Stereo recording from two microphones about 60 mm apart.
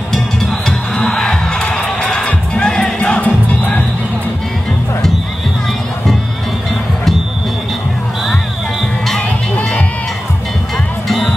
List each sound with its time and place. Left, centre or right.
0.1 s music: centre; by 3.8 s left
11.1 s music: centre